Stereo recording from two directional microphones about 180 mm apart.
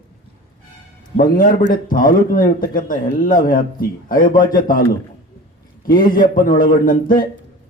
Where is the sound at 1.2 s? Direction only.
50° left (ahead or behind).